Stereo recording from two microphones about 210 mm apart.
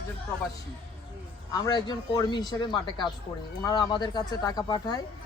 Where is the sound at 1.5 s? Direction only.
20° left (ahead or behind).